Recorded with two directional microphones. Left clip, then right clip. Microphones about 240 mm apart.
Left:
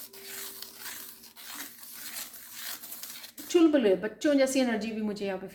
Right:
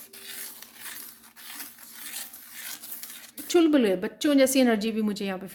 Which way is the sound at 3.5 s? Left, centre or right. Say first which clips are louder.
Right 1 dB; right.